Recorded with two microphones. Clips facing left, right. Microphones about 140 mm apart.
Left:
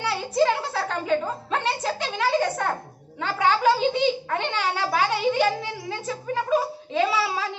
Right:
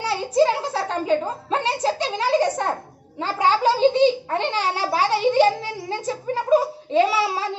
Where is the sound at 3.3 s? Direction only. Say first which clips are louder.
Right 1 dB; 30° right (ahead or behind).